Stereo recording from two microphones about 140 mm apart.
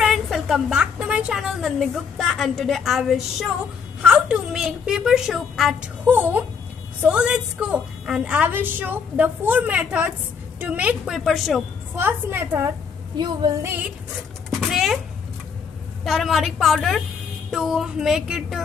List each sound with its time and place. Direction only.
0.0 s a woman's voice: centre (ahead or behind)
6.0 s a woman's voice: 15° right (ahead or behind)
12.0 s a woman's voice: 15° right (ahead or behind)
13.2 s female singing: 30° right (ahead or behind)
14.6 s a sound: centre (ahead or behind)
16.0 s a woman's voice: centre (ahead or behind)